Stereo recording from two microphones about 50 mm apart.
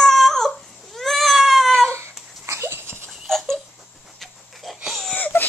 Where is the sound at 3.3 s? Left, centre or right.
Centre.